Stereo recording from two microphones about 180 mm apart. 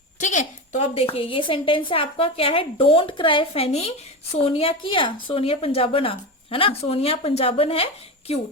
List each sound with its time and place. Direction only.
0.2 s a woman's voice: 40° left (ahead or behind)